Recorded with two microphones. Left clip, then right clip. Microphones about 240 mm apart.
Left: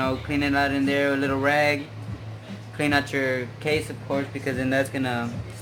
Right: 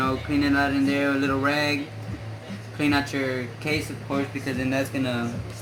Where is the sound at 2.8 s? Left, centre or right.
Left.